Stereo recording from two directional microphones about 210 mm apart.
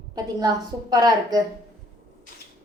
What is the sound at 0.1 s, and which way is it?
A woman's voice, 20° right (ahead or behind).